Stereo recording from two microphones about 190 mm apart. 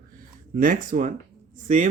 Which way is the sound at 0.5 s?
45° right (ahead or behind).